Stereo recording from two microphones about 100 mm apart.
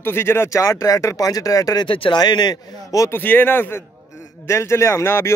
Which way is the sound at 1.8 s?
60° left (ahead or behind).